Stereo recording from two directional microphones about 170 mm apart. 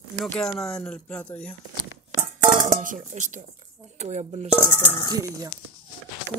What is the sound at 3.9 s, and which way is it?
Speech, 40° right (ahead or behind).